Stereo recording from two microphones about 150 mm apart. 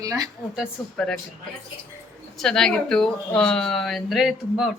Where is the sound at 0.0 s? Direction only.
25° right (ahead or behind).